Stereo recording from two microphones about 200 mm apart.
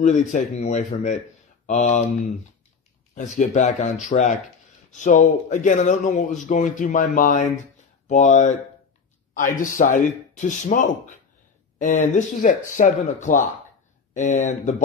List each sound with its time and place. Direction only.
0.0 s speech: 35° left (ahead or behind)
3.2 s speech: 40° left (ahead or behind)